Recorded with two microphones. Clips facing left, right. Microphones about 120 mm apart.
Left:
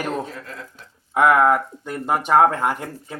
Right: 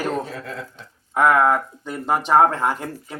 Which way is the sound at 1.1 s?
15° left (ahead or behind).